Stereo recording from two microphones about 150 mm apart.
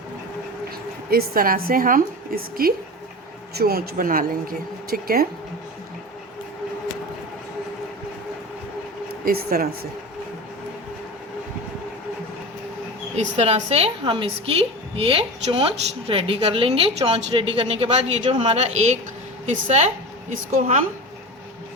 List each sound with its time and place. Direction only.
1.1 s a woman's voice: 75° right (ahead or behind)
9.2 s a woman's voice: 85° right
13.1 s a woman's voice: 45° right (ahead or behind)